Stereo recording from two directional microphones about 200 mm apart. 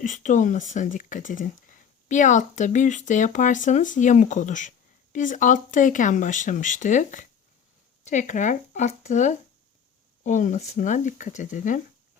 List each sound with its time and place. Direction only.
0.0 s speech: 40° left (ahead or behind)